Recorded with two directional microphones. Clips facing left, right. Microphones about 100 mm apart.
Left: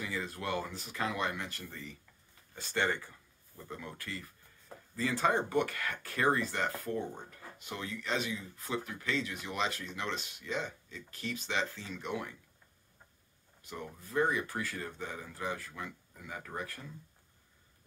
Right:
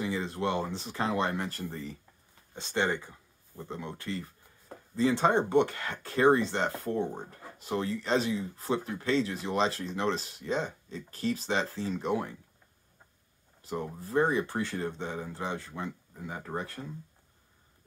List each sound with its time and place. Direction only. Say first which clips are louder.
0.0 s speech: right 7 dB; 30° right (ahead or behind)
2.5 s speech: right 3 dB; 25° right (ahead or behind)
13.6 s speech: right 8 dB; 35° right (ahead or behind)